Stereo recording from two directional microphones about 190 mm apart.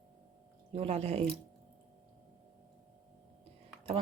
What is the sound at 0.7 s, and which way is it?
Speech, 35° right (ahead or behind).